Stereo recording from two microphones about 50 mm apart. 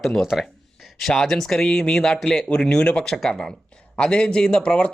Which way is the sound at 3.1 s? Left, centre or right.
Centre.